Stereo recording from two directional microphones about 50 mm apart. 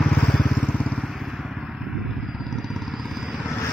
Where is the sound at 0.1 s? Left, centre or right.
Left.